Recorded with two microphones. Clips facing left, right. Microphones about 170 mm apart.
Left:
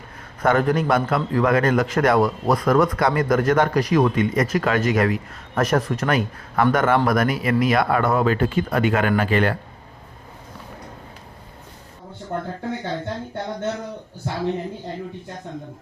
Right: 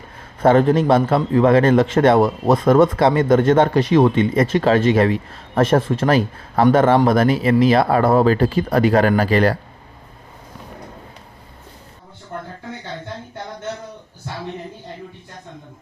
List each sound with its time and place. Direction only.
0.4 s a man's voice: 25° right (ahead or behind)